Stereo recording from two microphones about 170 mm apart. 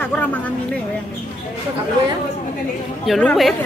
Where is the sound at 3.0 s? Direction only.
Centre (ahead or behind).